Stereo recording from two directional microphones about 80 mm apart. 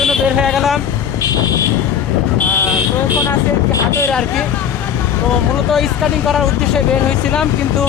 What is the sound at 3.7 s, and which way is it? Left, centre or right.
Speech, left.